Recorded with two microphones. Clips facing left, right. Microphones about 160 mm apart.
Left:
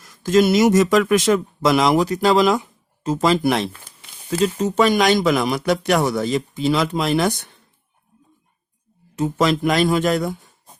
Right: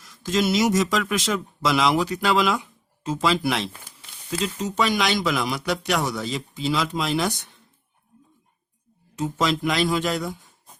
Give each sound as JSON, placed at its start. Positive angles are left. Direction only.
{"t": 0.0, "sound": "speech", "side_deg": 50}
{"t": 9.1, "sound": "speech", "side_deg": 60}